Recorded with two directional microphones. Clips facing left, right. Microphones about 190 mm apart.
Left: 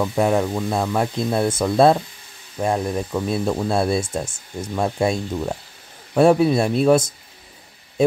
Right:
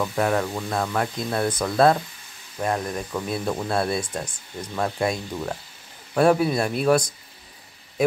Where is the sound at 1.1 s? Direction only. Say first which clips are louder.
Left 4 dB; 25° left (ahead or behind).